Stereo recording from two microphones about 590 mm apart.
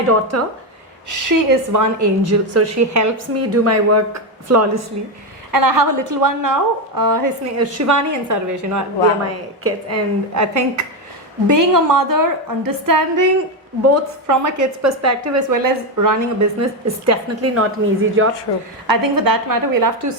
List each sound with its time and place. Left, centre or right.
0.1 s a woman's voice: right
18.9 s a woman's voice: right